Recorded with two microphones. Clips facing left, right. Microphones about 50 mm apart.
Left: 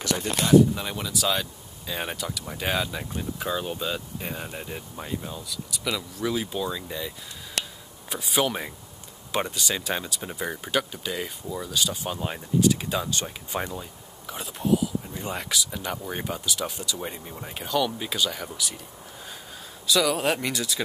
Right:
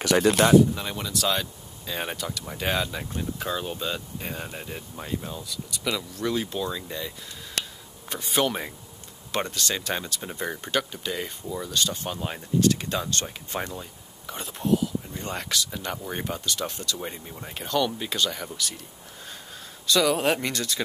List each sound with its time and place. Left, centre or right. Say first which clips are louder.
0.4 s speech: right 1 dB; right
0.7 s speech: even; centre
19.9 s speech: right 1 dB; centre